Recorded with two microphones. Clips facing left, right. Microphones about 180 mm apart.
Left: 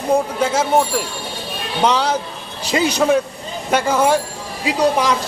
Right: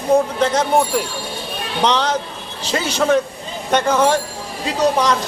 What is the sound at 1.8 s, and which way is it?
A man's voice, 10° left (ahead or behind).